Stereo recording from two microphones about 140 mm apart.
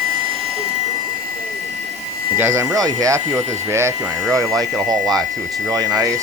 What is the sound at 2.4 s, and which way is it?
Speech, 20° right (ahead or behind).